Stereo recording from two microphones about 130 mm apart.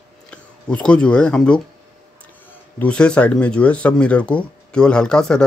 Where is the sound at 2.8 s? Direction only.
10° left (ahead or behind).